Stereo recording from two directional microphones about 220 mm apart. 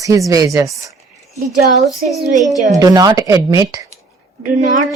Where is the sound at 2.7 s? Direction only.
15° right (ahead or behind).